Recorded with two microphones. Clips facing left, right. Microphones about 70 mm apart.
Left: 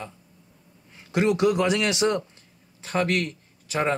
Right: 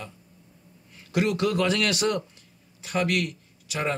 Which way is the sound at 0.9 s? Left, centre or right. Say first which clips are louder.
Left 3 dB; left.